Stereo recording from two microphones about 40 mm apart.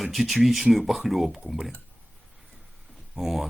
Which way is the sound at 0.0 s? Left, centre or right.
Centre.